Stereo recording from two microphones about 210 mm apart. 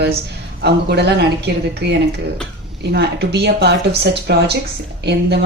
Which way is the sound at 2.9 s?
50° right (ahead or behind).